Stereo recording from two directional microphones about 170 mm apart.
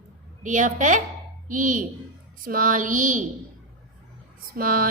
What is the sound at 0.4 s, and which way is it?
A woman's voice, 50° right (ahead or behind).